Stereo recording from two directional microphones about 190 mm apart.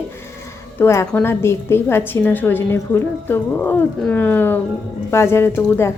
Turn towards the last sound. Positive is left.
turn(degrees=10)  # may be behind; listen again after turning